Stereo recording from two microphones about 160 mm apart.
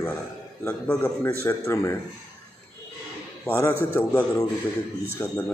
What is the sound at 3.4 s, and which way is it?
A man's voice, 15° left (ahead or behind).